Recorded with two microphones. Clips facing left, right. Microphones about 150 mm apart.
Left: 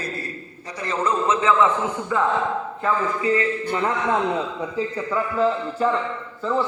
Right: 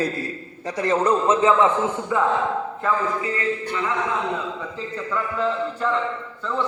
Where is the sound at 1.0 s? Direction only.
40° right (ahead or behind).